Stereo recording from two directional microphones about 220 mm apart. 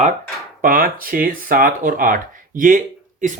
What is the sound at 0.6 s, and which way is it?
Speech, 40° right (ahead or behind).